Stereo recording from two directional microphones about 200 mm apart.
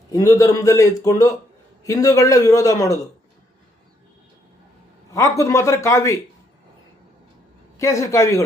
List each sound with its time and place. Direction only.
0.1 s a man's voice: 15° left (ahead or behind)
5.4 s a man's voice: 15° left (ahead or behind)
7.8 s a man's voice: 15° left (ahead or behind)